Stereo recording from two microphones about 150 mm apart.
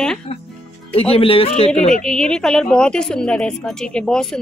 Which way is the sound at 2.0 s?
5° left (ahead or behind).